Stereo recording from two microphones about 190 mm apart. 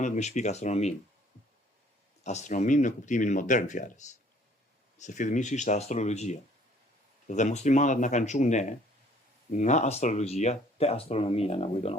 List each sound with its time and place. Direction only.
0.0 s speech: 35° left (ahead or behind)
2.2 s speech: 40° left (ahead or behind)